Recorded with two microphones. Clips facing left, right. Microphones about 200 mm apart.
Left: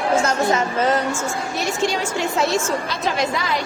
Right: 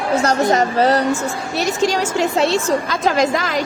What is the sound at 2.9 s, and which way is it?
Speech, 45° right (ahead or behind).